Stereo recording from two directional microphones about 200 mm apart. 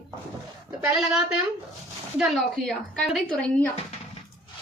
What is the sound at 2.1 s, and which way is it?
Speech, centre (ahead or behind).